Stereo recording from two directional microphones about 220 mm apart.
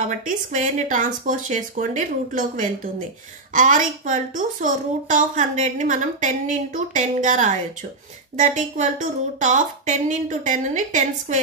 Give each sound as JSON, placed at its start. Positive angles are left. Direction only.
{"t": 0.1, "sound": "a woman's voice", "side_deg": -35}